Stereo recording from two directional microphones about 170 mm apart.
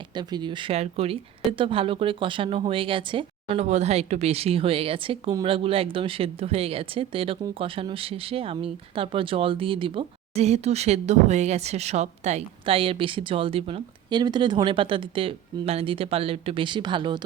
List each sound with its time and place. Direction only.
0.1 s speech: 25° right (ahead or behind)